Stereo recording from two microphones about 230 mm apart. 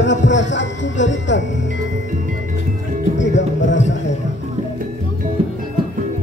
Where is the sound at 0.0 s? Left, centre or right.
Left.